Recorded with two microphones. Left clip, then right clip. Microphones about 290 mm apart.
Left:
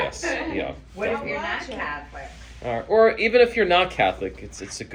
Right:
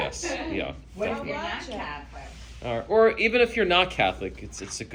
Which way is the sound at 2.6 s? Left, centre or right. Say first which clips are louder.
Left 3 dB; centre.